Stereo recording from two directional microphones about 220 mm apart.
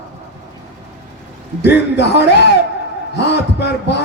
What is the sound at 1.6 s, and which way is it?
Speech, 50° left (ahead or behind).